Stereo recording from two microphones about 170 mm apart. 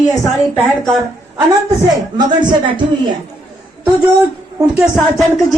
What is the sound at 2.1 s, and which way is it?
Speech, 25° right (ahead or behind).